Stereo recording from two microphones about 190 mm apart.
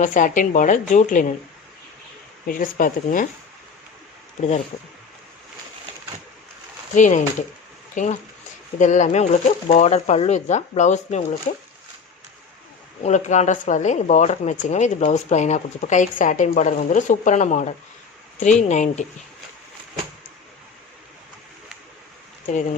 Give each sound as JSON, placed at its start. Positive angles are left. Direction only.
{"t": 0.0, "sound": "a woman's voice", "side_deg": 40}
{"t": 2.5, "sound": "a woman's voice", "side_deg": 45}
{"t": 6.9, "sound": "speech", "side_deg": 40}
{"t": 13.0, "sound": "speech", "side_deg": 40}